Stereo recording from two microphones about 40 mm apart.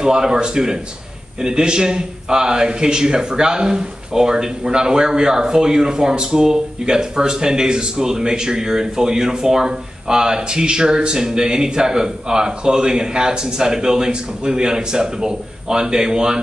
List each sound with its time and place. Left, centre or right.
0.0 s a man's voice: centre